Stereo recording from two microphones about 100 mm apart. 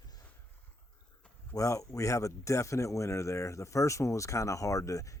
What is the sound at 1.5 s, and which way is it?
Speech, 35° left (ahead or behind).